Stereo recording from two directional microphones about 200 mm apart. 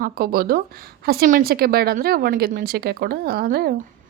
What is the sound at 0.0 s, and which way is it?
A woman's voice, 45° right (ahead or behind).